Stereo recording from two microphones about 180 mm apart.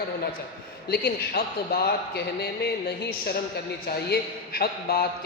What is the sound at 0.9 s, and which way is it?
A man's voice, 60° left (ahead or behind).